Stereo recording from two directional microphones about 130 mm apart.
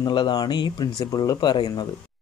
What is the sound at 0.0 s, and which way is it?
Speech, 35° left (ahead or behind).